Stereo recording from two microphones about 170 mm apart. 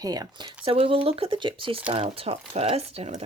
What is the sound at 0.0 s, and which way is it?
Speech, 20° right (ahead or behind).